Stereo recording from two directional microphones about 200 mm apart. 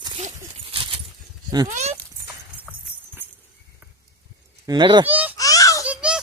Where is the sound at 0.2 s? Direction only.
30° right (ahead or behind).